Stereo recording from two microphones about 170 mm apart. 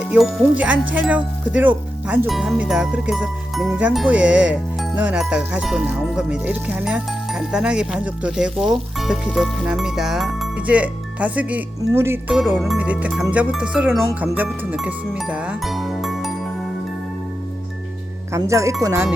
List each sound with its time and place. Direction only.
0.1 s speech: centre (ahead or behind)
18.3 s speech: 20° right (ahead or behind)